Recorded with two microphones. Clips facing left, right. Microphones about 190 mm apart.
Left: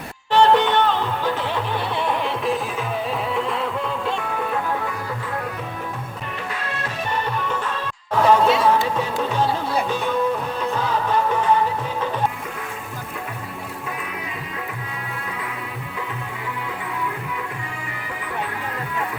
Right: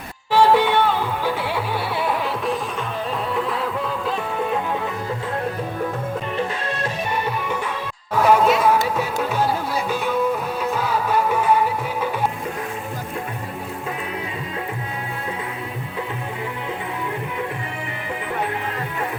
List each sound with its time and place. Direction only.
0.3 s music: 5° right (ahead or behind)
6.3 s music: 25° right (ahead or behind)
8.1 s music: 10° right (ahead or behind)